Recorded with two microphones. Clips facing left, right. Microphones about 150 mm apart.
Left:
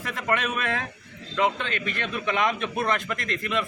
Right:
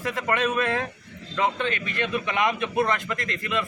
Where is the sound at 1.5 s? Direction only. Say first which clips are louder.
Right 3 dB; 20° right (ahead or behind).